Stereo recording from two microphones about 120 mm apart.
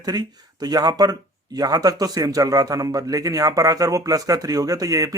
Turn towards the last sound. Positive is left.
turn(degrees=-30)  # may be behind; listen again after turning